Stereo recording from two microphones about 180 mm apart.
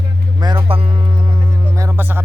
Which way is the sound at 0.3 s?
25° right (ahead or behind).